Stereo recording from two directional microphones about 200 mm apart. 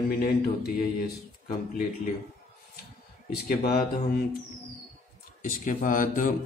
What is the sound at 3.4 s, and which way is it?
Speech, 50° left (ahead or behind).